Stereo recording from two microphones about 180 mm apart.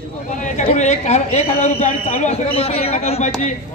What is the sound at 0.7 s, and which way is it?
A woman's voice, 40° left (ahead or behind).